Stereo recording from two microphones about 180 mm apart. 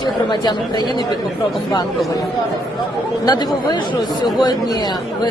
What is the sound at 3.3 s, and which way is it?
Speech, 25° left (ahead or behind).